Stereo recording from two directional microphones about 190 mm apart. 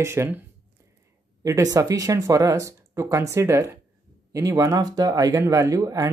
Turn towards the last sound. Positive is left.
turn(degrees=-15)  # may be behind; listen again after turning